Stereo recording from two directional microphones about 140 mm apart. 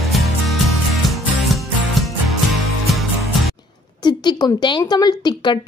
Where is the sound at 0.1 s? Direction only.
Centre (ahead or behind).